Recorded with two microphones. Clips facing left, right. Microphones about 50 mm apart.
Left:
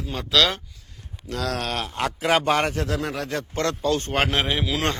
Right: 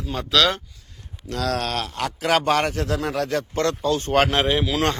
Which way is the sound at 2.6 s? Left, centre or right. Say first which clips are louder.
Right 1 dB; left.